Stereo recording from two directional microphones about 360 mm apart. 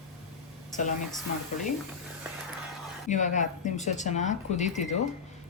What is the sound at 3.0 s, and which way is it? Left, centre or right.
Speech, centre.